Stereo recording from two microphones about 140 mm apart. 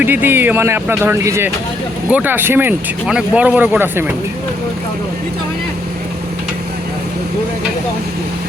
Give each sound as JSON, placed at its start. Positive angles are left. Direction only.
{"t": 0.0, "sound": "speech", "side_deg": -15}